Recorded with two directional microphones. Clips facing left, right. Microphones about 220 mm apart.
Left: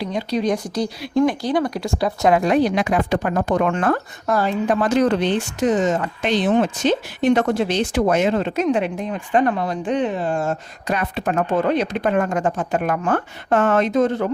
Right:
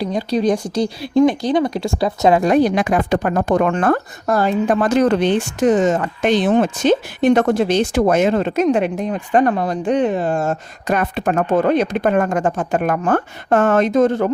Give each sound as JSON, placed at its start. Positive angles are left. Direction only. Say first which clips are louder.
{"t": 0.0, "sound": "speech", "louder": "right 4 dB", "side_deg": -35}
{"t": 2.4, "sound": "speech", "louder": "right 3 dB", "side_deg": -45}